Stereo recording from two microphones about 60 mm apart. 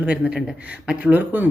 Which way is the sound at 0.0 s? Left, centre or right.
Right.